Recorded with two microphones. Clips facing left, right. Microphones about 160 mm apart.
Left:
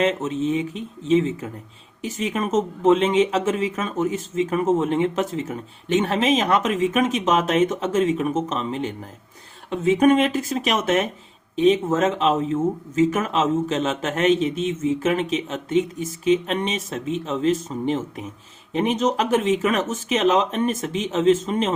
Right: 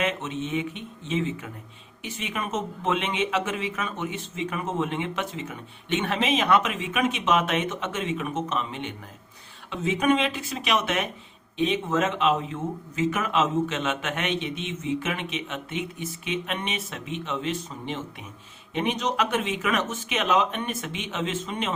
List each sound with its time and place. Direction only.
0.0 s speech: 35° left (ahead or behind)
9.6 s speech: 50° left (ahead or behind)